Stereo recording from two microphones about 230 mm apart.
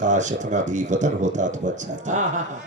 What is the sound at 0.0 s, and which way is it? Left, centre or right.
A man's voice, right.